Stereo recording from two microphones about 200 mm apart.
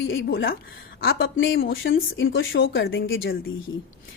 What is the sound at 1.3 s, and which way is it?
Speech, 75° left (ahead or behind).